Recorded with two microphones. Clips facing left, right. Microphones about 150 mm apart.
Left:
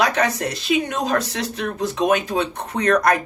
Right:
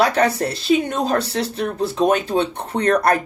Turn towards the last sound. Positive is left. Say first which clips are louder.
# right 1 dB
turn(degrees=-30)  # may be behind; listen again after turning